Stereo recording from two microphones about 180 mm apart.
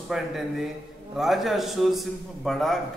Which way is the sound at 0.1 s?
Centre (ahead or behind).